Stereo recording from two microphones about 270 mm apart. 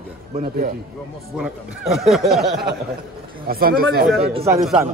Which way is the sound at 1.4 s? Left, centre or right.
Centre.